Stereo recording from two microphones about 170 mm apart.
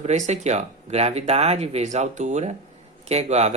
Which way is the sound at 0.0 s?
40° right (ahead or behind).